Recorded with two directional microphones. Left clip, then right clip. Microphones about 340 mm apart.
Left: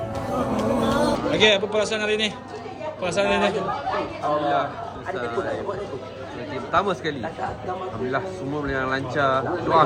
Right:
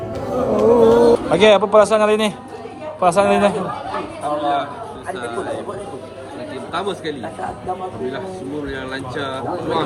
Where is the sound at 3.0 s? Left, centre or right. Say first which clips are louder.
Right 7 dB; centre.